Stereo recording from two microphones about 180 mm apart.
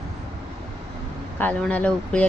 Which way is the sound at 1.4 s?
10° left (ahead or behind).